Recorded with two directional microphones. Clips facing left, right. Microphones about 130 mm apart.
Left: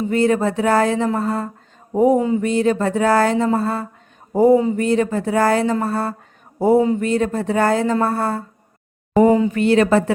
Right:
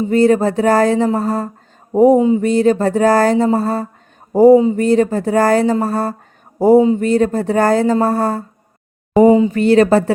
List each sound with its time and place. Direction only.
0.1 s speech: 35° right (ahead or behind)
2.1 s speech: 20° right (ahead or behind)
2.4 s speech: 35° right (ahead or behind)
6.7 s speech: 20° right (ahead or behind)
7.0 s speech: 35° right (ahead or behind)
9.1 s a sound: 15° right (ahead or behind)
9.5 s speech: 35° right (ahead or behind)